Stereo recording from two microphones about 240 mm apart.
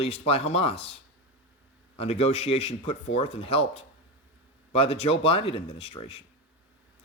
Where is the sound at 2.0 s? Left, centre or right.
Left.